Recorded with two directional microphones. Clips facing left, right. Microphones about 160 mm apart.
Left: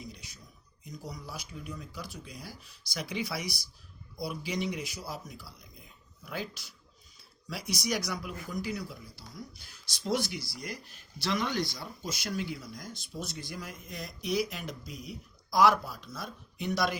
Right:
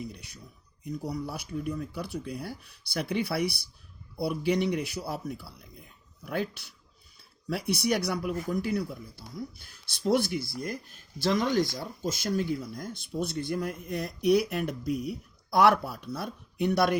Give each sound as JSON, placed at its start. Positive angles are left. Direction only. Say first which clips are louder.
{"t": 0.0, "sound": "speech", "louder": "right 6 dB", "side_deg": -60}